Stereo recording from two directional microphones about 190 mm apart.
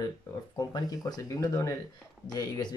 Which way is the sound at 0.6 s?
20° left (ahead or behind).